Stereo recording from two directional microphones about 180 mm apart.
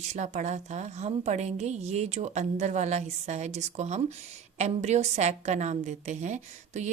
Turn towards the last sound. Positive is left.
turn(degrees=-40)  # may be behind; listen again after turning